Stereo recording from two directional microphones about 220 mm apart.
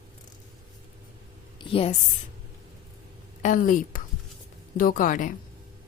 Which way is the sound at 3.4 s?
35° left (ahead or behind).